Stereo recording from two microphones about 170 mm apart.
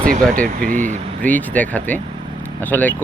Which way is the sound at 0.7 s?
50° right (ahead or behind).